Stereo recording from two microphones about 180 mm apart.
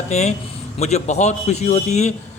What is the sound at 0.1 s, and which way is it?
A man's voice, 40° left (ahead or behind).